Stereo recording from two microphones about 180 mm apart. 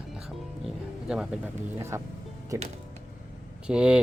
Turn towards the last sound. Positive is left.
turn(degrees=-5)  # may be behind; listen again after turning